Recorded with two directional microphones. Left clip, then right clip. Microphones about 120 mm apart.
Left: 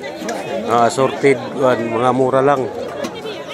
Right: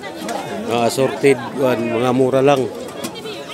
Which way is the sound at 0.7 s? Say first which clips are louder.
Left 3 dB; 15° right (ahead or behind).